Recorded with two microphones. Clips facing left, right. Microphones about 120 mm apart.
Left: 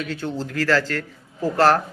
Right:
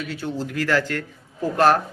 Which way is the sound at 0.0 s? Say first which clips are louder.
Left 1 dB; 10° right (ahead or behind).